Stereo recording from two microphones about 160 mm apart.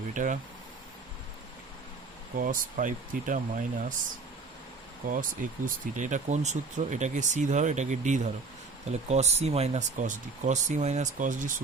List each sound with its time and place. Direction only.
0.1 s speech: 55° right (ahead or behind)
2.3 s speech: 60° right (ahead or behind)
5.0 s speech: 60° right (ahead or behind)